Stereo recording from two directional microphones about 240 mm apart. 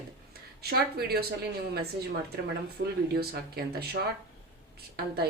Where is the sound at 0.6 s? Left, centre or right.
Right.